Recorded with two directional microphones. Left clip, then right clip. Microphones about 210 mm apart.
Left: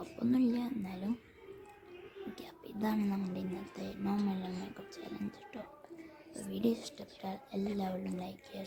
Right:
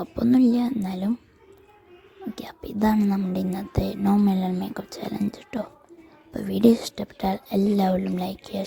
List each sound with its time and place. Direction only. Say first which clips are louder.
0.2 s speech: right 13 dB; 35° right (ahead or behind)
2.3 s speech: right 12 dB; 35° right (ahead or behind)